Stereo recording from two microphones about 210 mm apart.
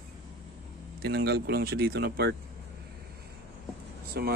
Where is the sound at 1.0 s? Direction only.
50° right (ahead or behind).